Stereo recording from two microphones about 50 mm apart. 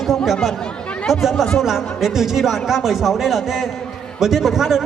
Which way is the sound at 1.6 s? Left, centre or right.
Centre.